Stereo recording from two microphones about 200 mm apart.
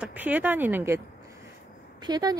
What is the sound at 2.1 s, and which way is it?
Speech, 20° right (ahead or behind).